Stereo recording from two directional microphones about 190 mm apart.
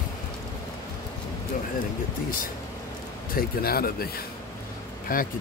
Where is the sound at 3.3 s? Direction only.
50° left (ahead or behind).